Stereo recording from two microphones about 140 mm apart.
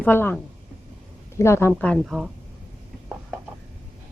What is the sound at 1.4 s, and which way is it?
Speech, 20° left (ahead or behind).